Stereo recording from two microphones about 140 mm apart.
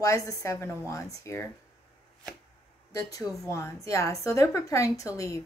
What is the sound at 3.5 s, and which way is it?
A woman's voice, 20° left (ahead or behind).